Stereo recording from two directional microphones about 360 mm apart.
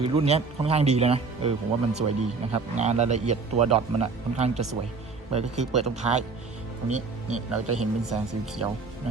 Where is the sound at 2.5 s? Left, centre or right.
Centre.